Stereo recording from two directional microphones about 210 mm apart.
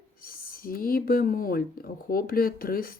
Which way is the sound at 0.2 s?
45° left (ahead or behind).